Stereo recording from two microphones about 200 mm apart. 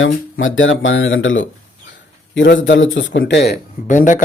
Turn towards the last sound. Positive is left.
turn(degrees=40)  # may be behind; listen again after turning